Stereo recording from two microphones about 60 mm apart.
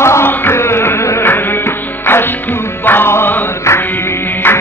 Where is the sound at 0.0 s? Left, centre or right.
Left.